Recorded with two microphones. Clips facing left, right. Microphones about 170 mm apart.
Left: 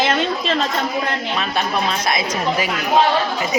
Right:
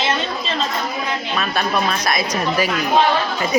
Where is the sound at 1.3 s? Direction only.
25° left (ahead or behind).